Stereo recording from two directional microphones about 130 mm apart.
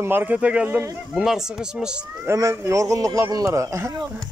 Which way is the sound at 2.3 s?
20° right (ahead or behind).